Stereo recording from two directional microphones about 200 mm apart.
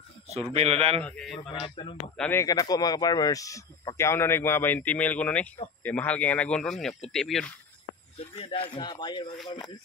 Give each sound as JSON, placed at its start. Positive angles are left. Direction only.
{"t": 0.3, "sound": "speech", "side_deg": -30}
{"t": 1.0, "sound": "speech", "side_deg": 0}
{"t": 1.8, "sound": "speech", "side_deg": 25}
{"t": 2.1, "sound": "speech", "side_deg": 5}
{"t": 2.4, "sound": "speech", "side_deg": 20}
{"t": 8.2, "sound": "speech", "side_deg": 30}